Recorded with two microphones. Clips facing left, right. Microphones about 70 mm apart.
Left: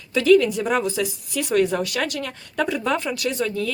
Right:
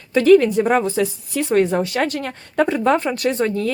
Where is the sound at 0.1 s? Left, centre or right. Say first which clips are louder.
Right 4 dB; right.